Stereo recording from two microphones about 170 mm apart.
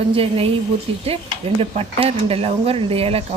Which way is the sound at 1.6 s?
35° right (ahead or behind).